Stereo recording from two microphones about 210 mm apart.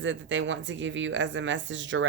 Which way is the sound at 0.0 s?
60° right (ahead or behind).